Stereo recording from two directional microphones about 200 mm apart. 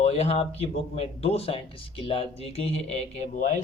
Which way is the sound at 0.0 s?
30° left (ahead or behind).